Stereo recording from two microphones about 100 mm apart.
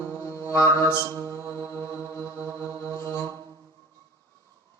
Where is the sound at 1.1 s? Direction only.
30° right (ahead or behind).